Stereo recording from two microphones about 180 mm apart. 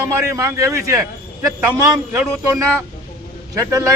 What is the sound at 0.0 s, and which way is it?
Speech, 15° right (ahead or behind).